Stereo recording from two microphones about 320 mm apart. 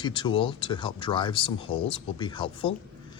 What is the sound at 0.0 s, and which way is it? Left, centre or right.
Speech, centre.